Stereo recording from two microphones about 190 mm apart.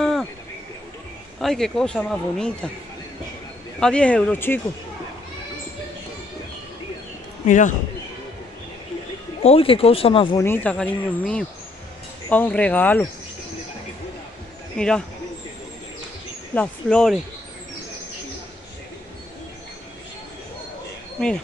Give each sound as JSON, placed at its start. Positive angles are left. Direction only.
{"t": 0.0, "sound": "a sound", "side_deg": 0}
{"t": 1.4, "sound": "speech", "side_deg": 0}
{"t": 3.8, "sound": "speech", "side_deg": 5}
{"t": 7.4, "sound": "a man's voice", "side_deg": 40}
{"t": 9.4, "sound": "speech", "side_deg": 30}
{"t": 10.4, "sound": "speech", "side_deg": 10}
{"t": 14.8, "sound": "speech", "side_deg": 5}
{"t": 16.5, "sound": "speech", "side_deg": 5}